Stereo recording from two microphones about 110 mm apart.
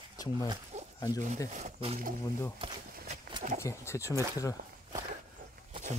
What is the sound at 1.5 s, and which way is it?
Speech, 75° right (ahead or behind).